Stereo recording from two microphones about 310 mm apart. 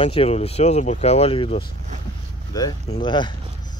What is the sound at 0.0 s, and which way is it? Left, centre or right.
Speech, centre.